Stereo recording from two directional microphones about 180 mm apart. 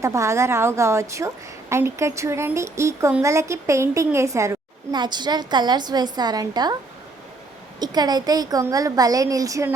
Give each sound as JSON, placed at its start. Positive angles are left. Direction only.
{"t": 0.0, "sound": "speech", "side_deg": -15}
{"t": 7.8, "sound": "a woman's voice", "side_deg": -20}